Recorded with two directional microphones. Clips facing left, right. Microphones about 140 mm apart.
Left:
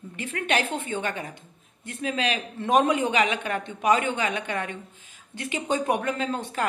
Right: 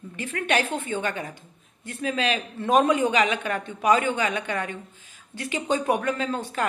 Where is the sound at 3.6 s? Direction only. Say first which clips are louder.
Right 1 dB; 25° left (ahead or behind).